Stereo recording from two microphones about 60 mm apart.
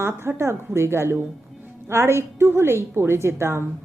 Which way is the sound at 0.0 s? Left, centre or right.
Right.